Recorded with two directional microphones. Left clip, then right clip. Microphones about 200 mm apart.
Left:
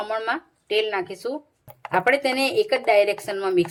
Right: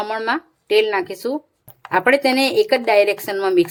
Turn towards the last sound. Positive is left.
turn(degrees=-35)  # may be behind; listen again after turning